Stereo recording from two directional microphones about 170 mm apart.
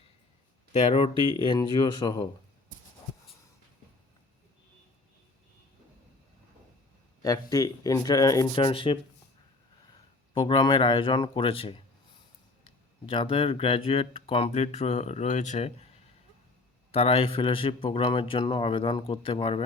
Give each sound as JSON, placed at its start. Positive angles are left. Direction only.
{"t": 0.7, "sound": "speech", "side_deg": 35}
{"t": 7.2, "sound": "speech", "side_deg": 20}
{"t": 10.3, "sound": "speech", "side_deg": 30}
{"t": 13.1, "sound": "speech", "side_deg": 35}
{"t": 16.9, "sound": "speech", "side_deg": 35}